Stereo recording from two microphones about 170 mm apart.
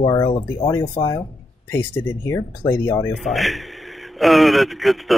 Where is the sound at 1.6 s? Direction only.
10° left (ahead or behind).